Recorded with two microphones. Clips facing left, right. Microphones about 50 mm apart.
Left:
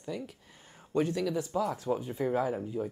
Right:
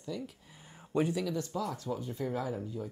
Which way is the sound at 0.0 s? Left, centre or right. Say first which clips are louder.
Left 1 dB; left.